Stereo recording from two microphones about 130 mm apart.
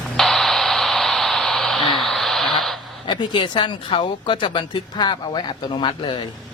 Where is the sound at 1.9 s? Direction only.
Centre (ahead or behind).